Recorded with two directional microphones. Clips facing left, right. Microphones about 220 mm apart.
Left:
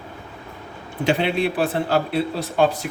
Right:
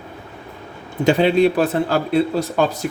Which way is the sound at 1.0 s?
40° right (ahead or behind).